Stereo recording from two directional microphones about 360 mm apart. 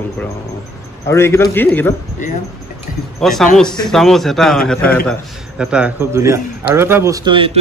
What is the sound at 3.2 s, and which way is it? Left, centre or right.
A man's voice, centre.